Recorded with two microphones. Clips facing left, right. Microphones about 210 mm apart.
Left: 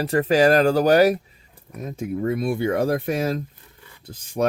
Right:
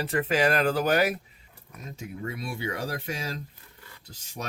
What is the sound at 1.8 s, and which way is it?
Speech, 50° left (ahead or behind).